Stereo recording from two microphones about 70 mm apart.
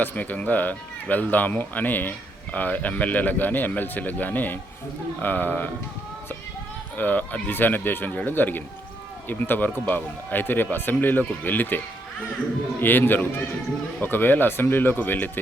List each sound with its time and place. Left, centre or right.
0.0 s speech: left
6.9 s speech: left
12.8 s speech: left